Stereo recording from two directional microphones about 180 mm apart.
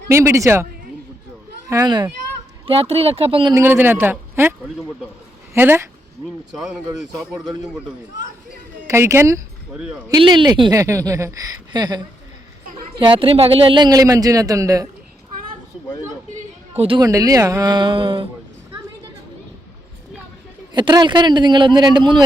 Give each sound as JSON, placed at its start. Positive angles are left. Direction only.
{"t": 0.1, "sound": "speech", "side_deg": -15}
{"t": 1.7, "sound": "speech", "side_deg": -20}
{"t": 2.6, "sound": "speech", "side_deg": -30}
{"t": 3.5, "sound": "speech", "side_deg": -10}
{"t": 5.5, "sound": "speech", "side_deg": -10}
{"t": 16.7, "sound": "speech", "side_deg": -30}
{"t": 17.1, "sound": "speech", "side_deg": -20}
{"t": 20.7, "sound": "speech", "side_deg": -25}